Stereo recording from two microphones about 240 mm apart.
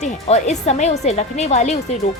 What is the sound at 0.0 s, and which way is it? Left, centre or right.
A woman's voice, left.